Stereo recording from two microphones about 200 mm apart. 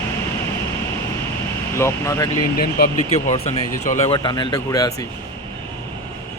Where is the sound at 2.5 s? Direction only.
50° left (ahead or behind).